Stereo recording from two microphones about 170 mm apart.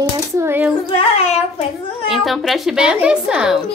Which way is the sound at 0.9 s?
35° left (ahead or behind).